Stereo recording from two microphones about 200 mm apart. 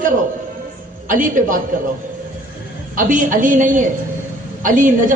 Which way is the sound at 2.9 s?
40° right (ahead or behind).